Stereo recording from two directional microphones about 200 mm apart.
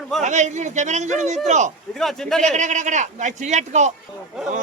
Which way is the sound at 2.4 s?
35° right (ahead or behind).